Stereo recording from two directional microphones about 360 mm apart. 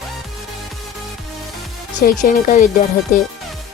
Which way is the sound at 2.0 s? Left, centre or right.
Left.